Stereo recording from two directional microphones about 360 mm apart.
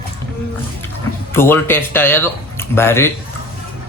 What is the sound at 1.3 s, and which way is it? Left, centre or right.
Speech, centre.